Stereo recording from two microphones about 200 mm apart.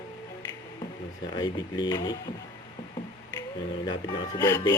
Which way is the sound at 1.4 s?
20° left (ahead or behind).